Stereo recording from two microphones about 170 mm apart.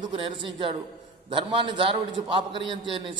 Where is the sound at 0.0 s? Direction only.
30° right (ahead or behind).